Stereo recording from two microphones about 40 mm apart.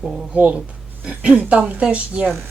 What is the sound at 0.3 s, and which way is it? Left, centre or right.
A woman's voice, right.